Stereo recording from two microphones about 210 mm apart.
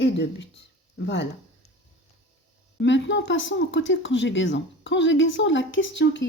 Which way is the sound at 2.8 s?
60° left (ahead or behind).